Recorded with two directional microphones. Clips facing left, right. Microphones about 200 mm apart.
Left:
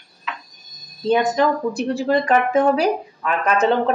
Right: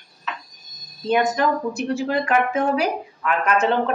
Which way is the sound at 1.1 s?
35° left (ahead or behind).